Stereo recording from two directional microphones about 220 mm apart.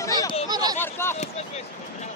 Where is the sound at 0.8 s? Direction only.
10° left (ahead or behind).